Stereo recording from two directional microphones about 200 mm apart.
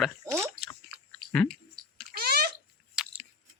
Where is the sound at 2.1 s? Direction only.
50° right (ahead or behind).